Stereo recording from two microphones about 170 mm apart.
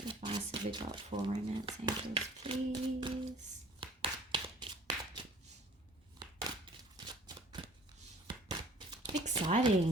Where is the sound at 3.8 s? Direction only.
30° right (ahead or behind).